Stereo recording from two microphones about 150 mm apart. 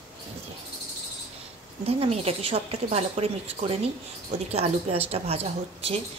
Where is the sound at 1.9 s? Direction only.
45° right (ahead or behind).